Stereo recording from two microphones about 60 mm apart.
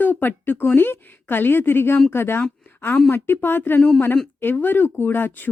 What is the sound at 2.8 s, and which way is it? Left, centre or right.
A woman's voice, left.